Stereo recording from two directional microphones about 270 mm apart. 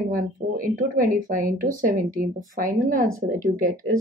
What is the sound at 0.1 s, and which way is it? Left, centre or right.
Speech, right.